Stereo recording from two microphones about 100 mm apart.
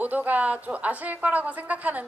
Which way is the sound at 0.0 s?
15° right (ahead or behind).